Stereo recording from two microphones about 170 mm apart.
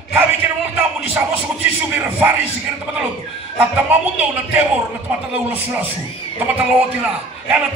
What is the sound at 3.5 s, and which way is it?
Speech, 10° right (ahead or behind).